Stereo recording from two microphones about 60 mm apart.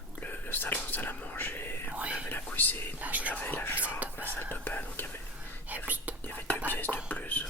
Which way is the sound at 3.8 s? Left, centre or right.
Right.